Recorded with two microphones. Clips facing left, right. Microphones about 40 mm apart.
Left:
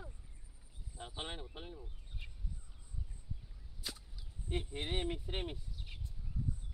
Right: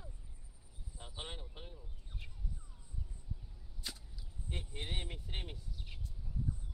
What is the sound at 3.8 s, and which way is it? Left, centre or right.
Whip, centre.